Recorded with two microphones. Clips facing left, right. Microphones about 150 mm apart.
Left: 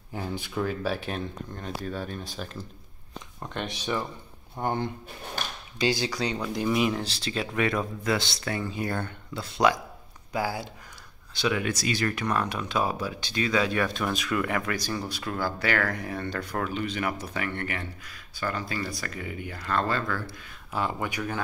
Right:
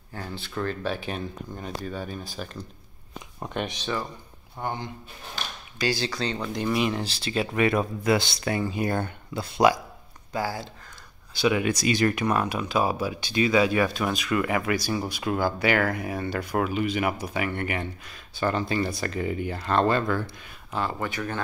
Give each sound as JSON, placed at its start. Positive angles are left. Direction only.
{"t": 0.1, "sound": "speech", "side_deg": 15}
{"t": 3.8, "sound": "speech", "side_deg": 15}
{"t": 4.6, "sound": "speech", "side_deg": 55}
{"t": 5.8, "sound": "speech", "side_deg": 15}
{"t": 10.3, "sound": "speech", "side_deg": 10}
{"t": 11.3, "sound": "speech", "side_deg": -10}
{"t": 20.7, "sound": "speech", "side_deg": 10}